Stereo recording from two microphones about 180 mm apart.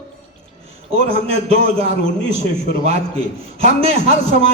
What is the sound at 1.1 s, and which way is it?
Speech, 35° right (ahead or behind).